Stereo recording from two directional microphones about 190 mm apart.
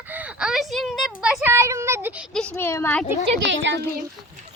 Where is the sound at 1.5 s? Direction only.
15° right (ahead or behind).